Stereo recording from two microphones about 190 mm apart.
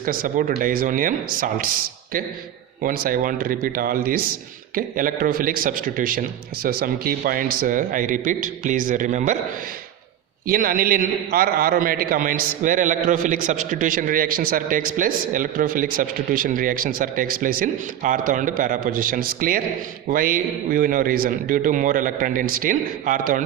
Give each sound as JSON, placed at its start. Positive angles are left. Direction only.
{"t": 0.0, "sound": "a man's voice", "side_deg": -45}
{"t": 10.4, "sound": "a man's voice", "side_deg": -50}